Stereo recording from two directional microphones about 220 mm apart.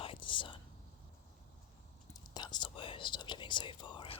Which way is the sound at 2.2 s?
20° left (ahead or behind).